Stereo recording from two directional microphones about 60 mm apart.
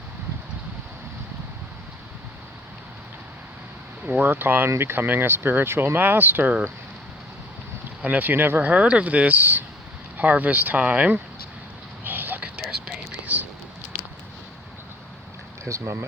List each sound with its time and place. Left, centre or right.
4.0 s speech: right
8.0 s speech: right
12.0 s a sound: right
15.6 s speech: right